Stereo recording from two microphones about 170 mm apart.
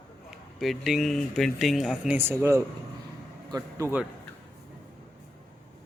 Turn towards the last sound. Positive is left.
turn(degrees=-15)  # may be behind; listen again after turning